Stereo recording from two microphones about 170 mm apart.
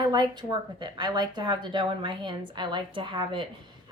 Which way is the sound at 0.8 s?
25° right (ahead or behind).